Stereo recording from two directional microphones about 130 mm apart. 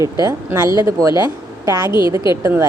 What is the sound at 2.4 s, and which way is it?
Speech, 20° right (ahead or behind).